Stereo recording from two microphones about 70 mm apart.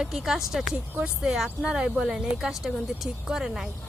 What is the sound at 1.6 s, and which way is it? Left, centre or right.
Speech, centre.